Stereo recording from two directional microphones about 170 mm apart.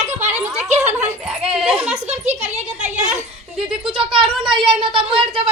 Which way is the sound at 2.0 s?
40° right (ahead or behind).